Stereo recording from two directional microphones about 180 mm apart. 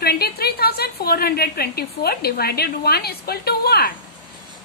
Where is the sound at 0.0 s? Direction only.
60° left (ahead or behind).